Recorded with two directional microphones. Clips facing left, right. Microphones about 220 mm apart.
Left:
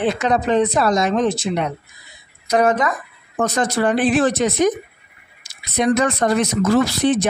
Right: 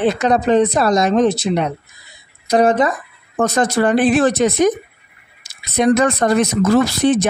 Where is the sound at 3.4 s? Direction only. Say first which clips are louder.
Right 3 dB; 45° right (ahead or behind).